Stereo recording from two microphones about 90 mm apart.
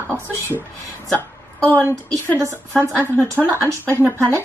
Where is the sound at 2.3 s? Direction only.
25° right (ahead or behind).